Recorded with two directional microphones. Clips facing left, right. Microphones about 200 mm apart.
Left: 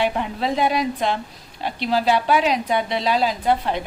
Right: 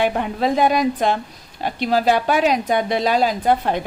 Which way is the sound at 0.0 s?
50° right (ahead or behind).